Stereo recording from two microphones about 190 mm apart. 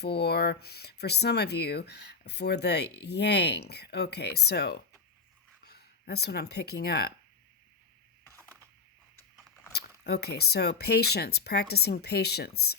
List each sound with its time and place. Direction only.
0.0 s speech: 60° left (ahead or behind)
9.7 s speech: 55° left (ahead or behind)